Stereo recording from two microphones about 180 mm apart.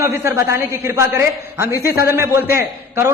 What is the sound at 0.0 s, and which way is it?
A man's voice, 15° right (ahead or behind).